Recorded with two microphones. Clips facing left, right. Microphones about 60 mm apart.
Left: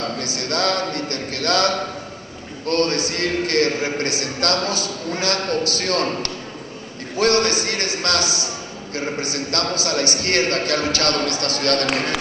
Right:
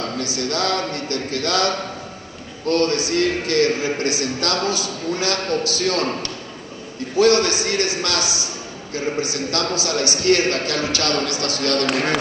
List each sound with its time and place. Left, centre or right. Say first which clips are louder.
0.2 s a man's voice: right 1 dB; left
2.7 s a man's voice: right 2 dB; left